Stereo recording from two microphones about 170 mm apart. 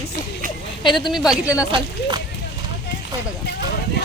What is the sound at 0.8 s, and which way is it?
Speech, 30° left (ahead or behind).